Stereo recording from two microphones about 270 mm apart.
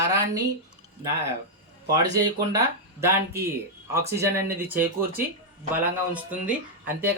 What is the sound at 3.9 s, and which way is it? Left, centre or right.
Speech, centre.